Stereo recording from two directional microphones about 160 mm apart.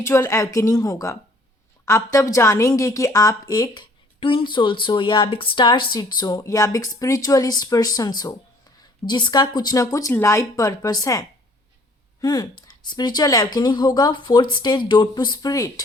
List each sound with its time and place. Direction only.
0.0 s a woman's voice: 15° left (ahead or behind)